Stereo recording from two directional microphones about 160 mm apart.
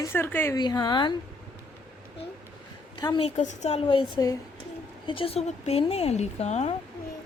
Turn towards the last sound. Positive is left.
turn(degrees=45)  # may be behind; listen again after turning